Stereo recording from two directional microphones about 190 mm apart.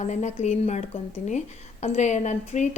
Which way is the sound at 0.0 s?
40° left (ahead or behind).